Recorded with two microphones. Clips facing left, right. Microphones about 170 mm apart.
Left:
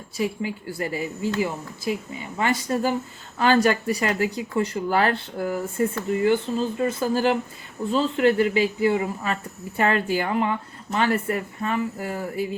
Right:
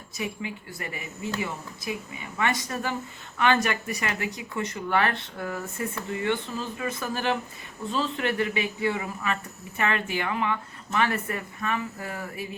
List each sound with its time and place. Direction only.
0.2 s a woman's voice: 30° left (ahead or behind)